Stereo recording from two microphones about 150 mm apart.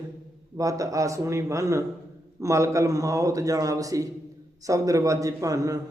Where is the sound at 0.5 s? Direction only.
25° right (ahead or behind).